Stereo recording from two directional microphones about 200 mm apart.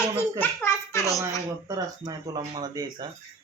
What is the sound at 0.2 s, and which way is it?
A child's voice, 10° left (ahead or behind).